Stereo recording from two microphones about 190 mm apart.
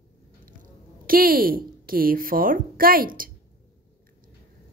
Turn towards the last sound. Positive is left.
turn(degrees=-50)  # may be behind; listen again after turning